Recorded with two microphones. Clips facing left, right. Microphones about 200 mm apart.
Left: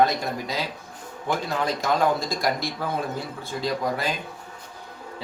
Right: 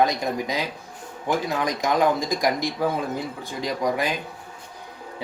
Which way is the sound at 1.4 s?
15° right (ahead or behind).